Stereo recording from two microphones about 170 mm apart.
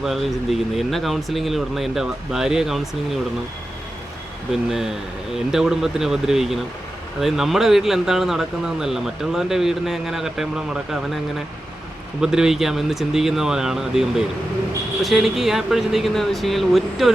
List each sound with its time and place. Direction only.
0.0 s speech: centre (ahead or behind)
4.7 s speech: centre (ahead or behind)
12.2 s speech: 5° right (ahead or behind)